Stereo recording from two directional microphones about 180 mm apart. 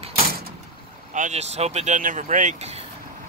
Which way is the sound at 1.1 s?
40° right (ahead or behind).